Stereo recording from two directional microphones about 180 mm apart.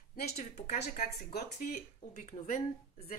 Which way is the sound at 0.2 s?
60° left (ahead or behind).